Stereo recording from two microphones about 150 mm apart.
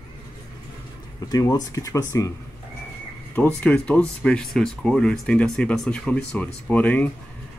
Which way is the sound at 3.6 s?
10° left (ahead or behind).